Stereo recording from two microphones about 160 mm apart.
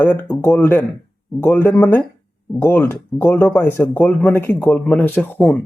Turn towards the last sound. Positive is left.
turn(degrees=10)  # may be behind; listen again after turning